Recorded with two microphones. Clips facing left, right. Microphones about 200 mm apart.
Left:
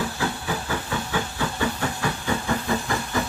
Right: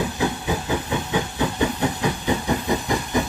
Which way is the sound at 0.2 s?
20° right (ahead or behind).